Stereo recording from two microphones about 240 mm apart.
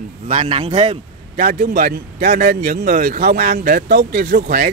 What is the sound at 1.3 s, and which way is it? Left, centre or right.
A man's voice, right.